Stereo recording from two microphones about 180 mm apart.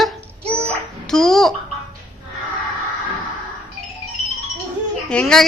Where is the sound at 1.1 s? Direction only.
Centre (ahead or behind).